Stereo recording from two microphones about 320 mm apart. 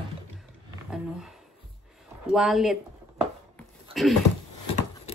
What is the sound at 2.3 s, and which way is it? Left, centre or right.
Speech, centre.